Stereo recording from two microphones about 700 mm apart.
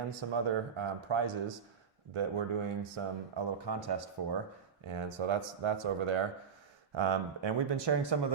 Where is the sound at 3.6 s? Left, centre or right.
Right.